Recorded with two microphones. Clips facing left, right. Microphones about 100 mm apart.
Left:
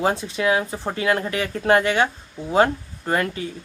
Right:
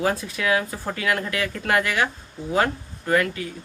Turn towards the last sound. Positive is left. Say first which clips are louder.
# right 1 dB
turn(degrees=30)  # may be behind; listen again after turning